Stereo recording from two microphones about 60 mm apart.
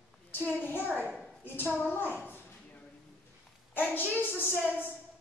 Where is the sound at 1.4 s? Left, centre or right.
Left.